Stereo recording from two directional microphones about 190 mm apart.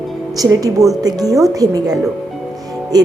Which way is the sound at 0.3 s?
20° right (ahead or behind).